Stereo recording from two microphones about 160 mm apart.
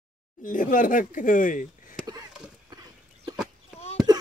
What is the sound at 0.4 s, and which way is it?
Speech, 55° left (ahead or behind).